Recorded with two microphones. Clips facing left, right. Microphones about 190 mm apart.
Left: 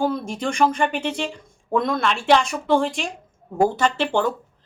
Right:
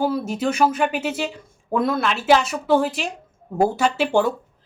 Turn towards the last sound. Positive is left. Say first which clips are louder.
# right 2 dB
turn(degrees=-10)  # may be behind; listen again after turning